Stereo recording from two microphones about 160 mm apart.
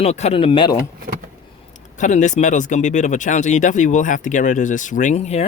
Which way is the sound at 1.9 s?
50° left (ahead or behind).